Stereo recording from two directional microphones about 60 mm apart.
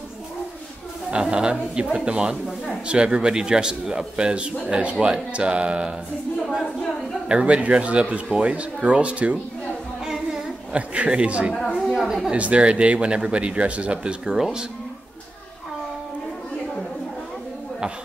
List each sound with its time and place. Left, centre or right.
1.1 s a man's voice: centre
2.4 s a man's voice: centre
2.9 s a man's voice: centre
6.6 s a woman's voice: centre
7.2 s speech: centre
10.0 s child singing: centre
10.7 s speech: centre
11.7 s a sound: centre
12.0 s speech: centre
12.3 s speech: centre